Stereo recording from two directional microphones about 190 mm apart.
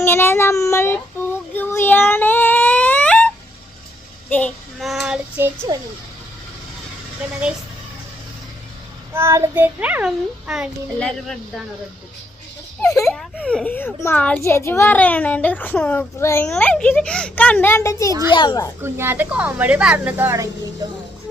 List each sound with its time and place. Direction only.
0.0 s child singing: 10° left (ahead or behind); by 5.5 s 5° right (ahead or behind)
5.7 s speech: 20° right (ahead or behind)
9.1 s a child's voice: 15° right (ahead or behind); by 11.6 s centre (ahead or behind)
12.9 s speech: 15° left (ahead or behind)
13.1 s a child's voice: centre (ahead or behind); by 18.7 s 20° left (ahead or behind)
18.8 s a child's voice: 10° right (ahead or behind)